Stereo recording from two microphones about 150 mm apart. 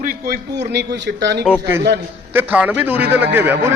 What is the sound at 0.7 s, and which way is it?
Speech, 90° right.